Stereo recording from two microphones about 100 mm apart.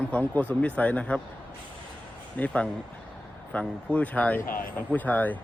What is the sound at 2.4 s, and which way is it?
A man's voice, 15° left (ahead or behind).